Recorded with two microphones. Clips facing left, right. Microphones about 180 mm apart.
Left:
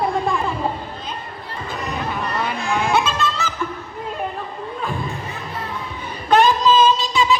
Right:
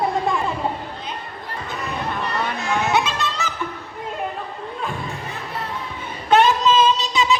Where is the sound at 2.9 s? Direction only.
20° right (ahead or behind).